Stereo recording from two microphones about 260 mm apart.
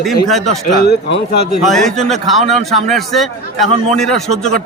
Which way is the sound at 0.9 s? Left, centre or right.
Left.